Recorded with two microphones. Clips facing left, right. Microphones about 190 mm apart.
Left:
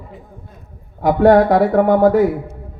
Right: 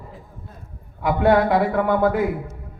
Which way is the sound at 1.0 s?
45° left (ahead or behind).